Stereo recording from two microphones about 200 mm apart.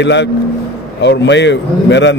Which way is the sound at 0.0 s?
60° left (ahead or behind).